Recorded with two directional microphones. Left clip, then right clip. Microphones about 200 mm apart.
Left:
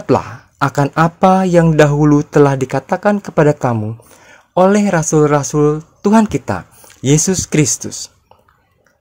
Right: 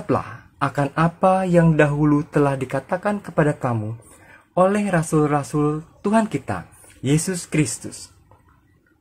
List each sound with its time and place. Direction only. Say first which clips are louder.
0.0 s speech: left 8 dB; 45° left (ahead or behind)